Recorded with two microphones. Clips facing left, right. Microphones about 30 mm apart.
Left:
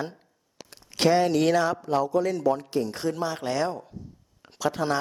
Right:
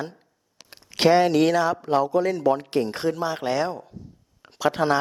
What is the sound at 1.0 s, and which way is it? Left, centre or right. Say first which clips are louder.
Speech: right 4 dB; right.